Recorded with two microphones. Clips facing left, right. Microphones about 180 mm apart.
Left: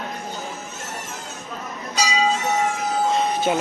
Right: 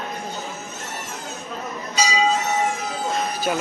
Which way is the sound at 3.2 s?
25° left (ahead or behind).